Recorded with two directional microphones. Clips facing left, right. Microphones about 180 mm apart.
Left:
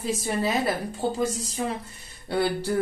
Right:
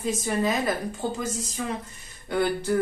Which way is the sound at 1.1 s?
35° left (ahead or behind).